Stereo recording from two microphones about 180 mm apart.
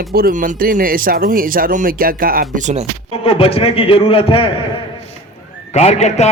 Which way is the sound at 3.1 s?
30° left (ahead or behind).